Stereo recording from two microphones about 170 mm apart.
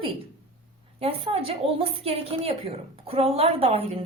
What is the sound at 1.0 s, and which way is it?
A woman's voice, 35° right (ahead or behind).